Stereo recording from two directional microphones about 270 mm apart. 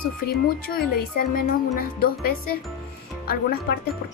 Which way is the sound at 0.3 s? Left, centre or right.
Left.